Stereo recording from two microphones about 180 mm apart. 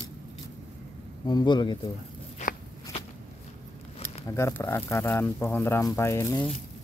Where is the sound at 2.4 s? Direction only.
45° left (ahead or behind).